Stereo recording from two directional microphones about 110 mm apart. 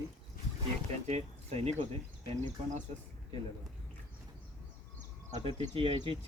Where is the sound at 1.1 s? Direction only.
90° right.